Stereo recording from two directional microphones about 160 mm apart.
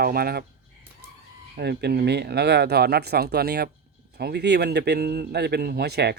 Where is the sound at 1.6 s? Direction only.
85° right.